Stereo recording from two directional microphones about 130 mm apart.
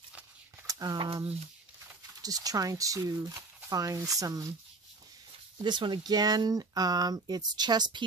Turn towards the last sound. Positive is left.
turn(degrees=-35)  # may be behind; listen again after turning